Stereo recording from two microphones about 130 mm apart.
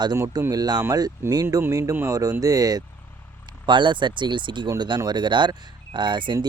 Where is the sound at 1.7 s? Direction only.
20° right (ahead or behind).